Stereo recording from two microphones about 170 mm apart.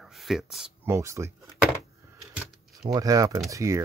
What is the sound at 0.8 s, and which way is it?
Speech, 15° right (ahead or behind).